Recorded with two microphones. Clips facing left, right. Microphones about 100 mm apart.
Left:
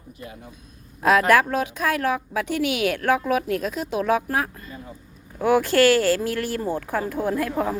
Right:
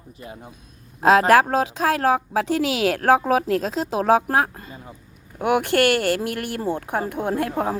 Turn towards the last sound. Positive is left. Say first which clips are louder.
# right 1 dB
turn(degrees=-25)  # may be behind; listen again after turning